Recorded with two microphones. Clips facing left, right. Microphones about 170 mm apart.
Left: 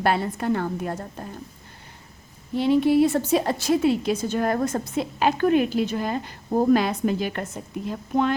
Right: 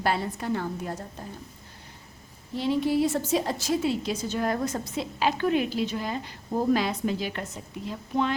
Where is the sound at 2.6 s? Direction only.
60° left (ahead or behind).